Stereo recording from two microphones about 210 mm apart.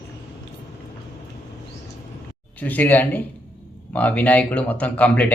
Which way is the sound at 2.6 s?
10° left (ahead or behind).